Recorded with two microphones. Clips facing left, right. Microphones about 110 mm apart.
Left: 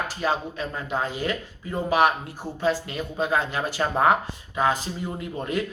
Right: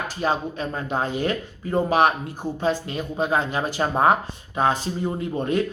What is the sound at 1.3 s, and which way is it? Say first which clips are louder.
Speech: right 5 dB; 25° right (ahead or behind).